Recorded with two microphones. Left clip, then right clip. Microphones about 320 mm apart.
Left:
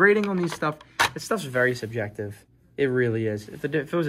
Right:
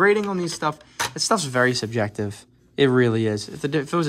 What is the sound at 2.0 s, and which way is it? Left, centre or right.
Speech, right.